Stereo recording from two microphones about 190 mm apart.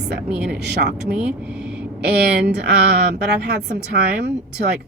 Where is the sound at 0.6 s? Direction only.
60° right (ahead or behind).